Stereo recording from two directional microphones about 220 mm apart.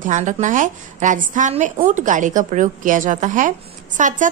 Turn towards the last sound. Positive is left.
turn(degrees=-35)  # may be behind; listen again after turning